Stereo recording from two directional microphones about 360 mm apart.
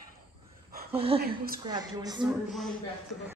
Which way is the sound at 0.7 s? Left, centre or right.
Right.